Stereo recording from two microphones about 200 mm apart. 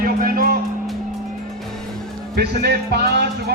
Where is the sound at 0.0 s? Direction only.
45° right (ahead or behind).